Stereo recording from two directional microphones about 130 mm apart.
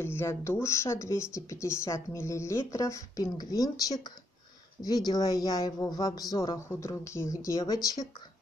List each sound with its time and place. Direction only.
0.0 s speech: 20° left (ahead or behind)